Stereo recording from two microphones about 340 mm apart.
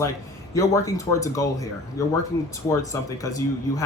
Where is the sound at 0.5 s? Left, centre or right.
Centre.